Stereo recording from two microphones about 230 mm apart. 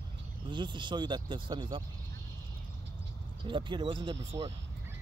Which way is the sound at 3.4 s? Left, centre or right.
Right.